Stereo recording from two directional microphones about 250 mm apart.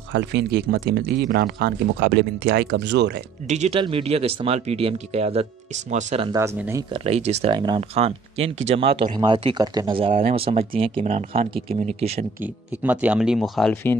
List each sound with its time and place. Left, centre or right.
0.1 s speech: right
3.4 s speech: right
6.3 s speech: centre
7.1 s speech: right
12.4 s speech: centre